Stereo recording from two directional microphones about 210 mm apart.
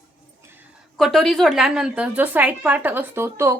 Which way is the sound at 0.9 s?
Centre (ahead or behind).